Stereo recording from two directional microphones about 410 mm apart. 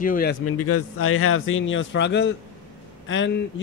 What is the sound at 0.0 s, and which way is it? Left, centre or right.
Speech, left.